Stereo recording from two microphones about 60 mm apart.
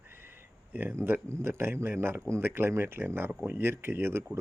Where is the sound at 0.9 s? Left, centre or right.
Right.